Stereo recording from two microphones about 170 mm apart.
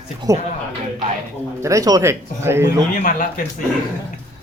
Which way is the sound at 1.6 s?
20° right (ahead or behind).